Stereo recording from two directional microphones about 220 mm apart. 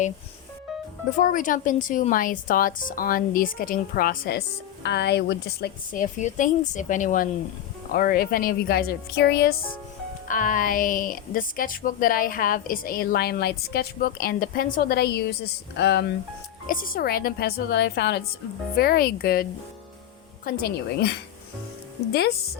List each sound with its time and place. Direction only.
1.2 s a woman's voice: 35° left (ahead or behind)
16.6 s a woman's voice: 40° left (ahead or behind)